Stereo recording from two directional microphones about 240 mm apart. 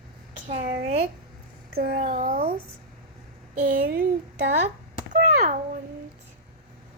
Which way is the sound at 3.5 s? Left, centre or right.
Right.